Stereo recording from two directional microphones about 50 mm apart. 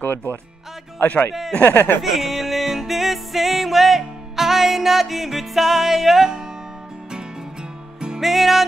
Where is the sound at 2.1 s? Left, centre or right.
Centre.